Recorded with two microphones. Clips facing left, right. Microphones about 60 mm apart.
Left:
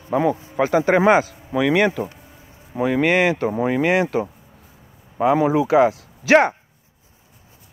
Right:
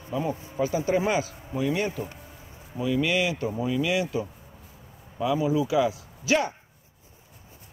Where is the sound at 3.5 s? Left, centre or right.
Left.